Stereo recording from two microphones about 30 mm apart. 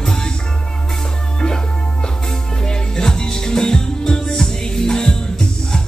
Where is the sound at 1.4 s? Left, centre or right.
Left.